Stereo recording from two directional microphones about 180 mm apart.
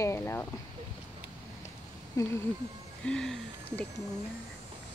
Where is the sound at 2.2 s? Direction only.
20° left (ahead or behind).